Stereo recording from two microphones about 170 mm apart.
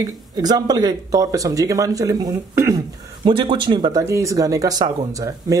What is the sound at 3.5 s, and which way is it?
Speech, 25° right (ahead or behind).